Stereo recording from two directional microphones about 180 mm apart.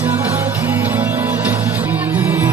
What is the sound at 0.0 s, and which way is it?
Music, 10° right (ahead or behind).